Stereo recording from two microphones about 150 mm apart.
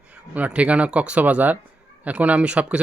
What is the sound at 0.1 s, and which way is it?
Speech, 10° right (ahead or behind).